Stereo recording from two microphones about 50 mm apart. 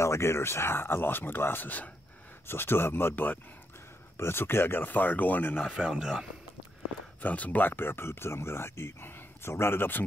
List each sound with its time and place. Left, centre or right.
0.0 s speech: left
2.4 s speech: left
5.8 s speech: centre
7.2 s speech: left